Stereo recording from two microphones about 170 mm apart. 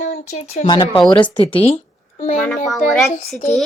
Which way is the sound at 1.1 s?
30° left (ahead or behind).